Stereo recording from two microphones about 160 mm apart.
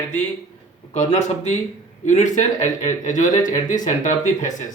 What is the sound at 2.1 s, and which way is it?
Speech, 50° left (ahead or behind).